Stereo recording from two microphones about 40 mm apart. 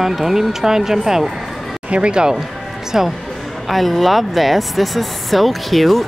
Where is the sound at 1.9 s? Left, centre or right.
Right.